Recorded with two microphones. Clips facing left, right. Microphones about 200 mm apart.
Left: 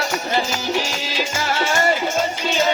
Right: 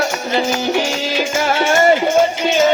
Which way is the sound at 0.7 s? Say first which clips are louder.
Right 6 dB; 55° right (ahead or behind).